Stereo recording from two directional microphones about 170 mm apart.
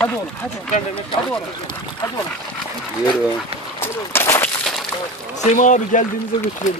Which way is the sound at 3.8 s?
15° left (ahead or behind).